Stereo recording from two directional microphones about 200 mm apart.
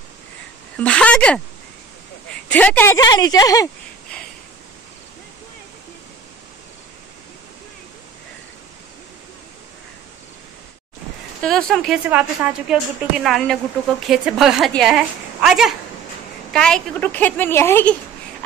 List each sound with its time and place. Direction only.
0.7 s a woman's voice: 5° left (ahead or behind)
2.4 s a woman's voice: 10° left (ahead or behind)
3.0 s speech: 20° left (ahead or behind)
11.4 s a woman's voice: centre (ahead or behind)